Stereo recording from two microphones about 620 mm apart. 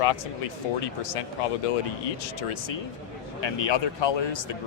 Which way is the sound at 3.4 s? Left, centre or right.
Left.